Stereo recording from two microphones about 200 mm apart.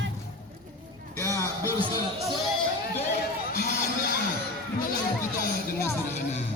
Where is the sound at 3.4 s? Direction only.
50° left (ahead or behind).